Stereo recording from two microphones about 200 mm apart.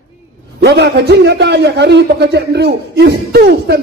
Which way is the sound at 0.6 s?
55° right (ahead or behind).